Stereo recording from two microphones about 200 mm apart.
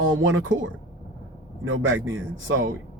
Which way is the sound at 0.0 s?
70° right (ahead or behind).